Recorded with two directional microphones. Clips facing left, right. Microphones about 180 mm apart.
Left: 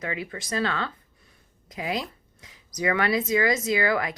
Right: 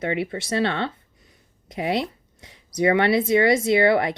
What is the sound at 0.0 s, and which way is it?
Speech, 30° right (ahead or behind).